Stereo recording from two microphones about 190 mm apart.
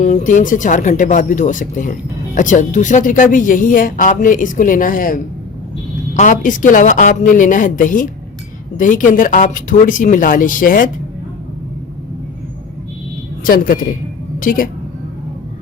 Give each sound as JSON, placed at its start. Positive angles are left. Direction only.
{"t": 0.0, "sound": "speech", "side_deg": 40}
{"t": 13.4, "sound": "speech", "side_deg": 45}